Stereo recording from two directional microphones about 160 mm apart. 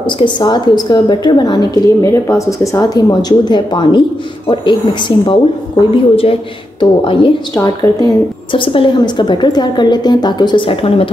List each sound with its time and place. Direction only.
0.0 s a woman's voice: 30° left (ahead or behind)
6.8 s a woman's voice: 35° left (ahead or behind)